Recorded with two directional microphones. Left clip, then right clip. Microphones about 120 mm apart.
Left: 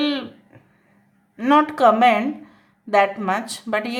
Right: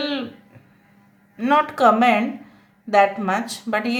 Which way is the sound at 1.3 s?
40° left (ahead or behind).